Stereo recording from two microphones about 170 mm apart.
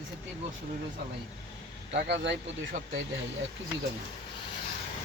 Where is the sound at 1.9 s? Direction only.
90° right.